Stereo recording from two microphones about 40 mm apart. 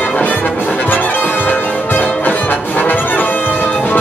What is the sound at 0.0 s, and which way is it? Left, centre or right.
Music, left.